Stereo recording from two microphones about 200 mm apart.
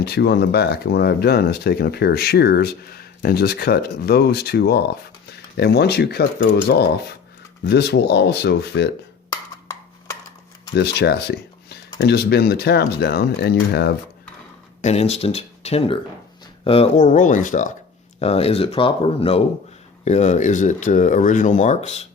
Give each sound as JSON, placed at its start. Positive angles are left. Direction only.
{"t": 0.0, "sound": "speech", "side_deg": 55}
{"t": 10.8, "sound": "speech", "side_deg": 55}
{"t": 14.8, "sound": "speech", "side_deg": 35}